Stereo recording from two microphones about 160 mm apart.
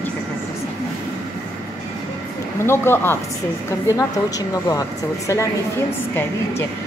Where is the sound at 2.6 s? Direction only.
15° left (ahead or behind).